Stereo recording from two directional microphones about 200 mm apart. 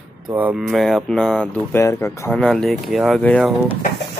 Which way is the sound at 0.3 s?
10° right (ahead or behind).